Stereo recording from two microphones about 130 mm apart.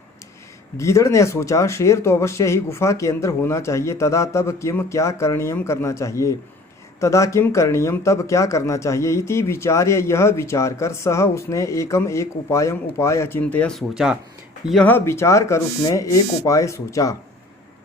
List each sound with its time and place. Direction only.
0.8 s speech: 25° left (ahead or behind)
13.7 s speech: 5° right (ahead or behind)
14.8 s speech: 20° left (ahead or behind)